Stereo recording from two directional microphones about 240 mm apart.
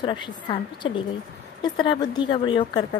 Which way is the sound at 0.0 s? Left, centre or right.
Centre.